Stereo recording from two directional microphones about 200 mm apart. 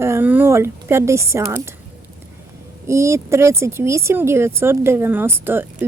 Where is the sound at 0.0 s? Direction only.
10° right (ahead or behind).